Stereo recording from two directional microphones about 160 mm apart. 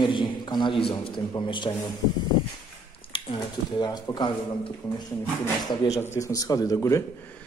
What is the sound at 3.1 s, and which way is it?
Speech, 30° left (ahead or behind).